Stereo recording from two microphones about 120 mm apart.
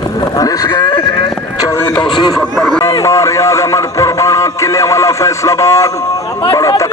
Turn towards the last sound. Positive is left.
turn(degrees=30)  # may be behind; listen again after turning